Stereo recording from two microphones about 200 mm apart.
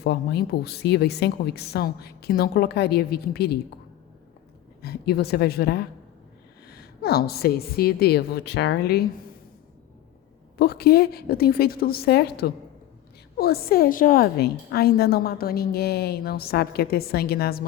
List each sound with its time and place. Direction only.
0.0 s a woman's voice: 55° left (ahead or behind)
4.8 s a woman's voice: 55° left (ahead or behind)
10.6 s a woman's voice: 50° left (ahead or behind)